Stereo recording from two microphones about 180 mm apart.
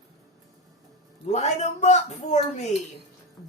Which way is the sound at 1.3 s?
40° left (ahead or behind).